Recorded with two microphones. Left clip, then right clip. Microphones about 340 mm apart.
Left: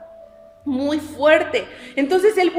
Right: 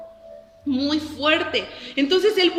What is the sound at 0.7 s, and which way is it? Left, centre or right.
A woman's voice, centre.